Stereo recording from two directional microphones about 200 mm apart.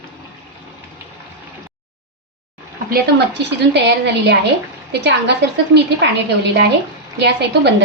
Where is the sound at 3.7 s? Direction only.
60° right (ahead or behind).